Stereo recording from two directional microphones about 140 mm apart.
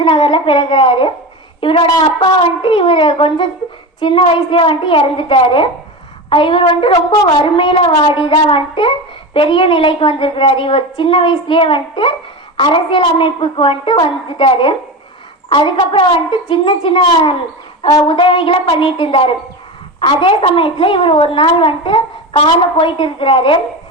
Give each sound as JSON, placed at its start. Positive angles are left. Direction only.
{"t": 0.0, "sound": "a woman's voice", "side_deg": 40}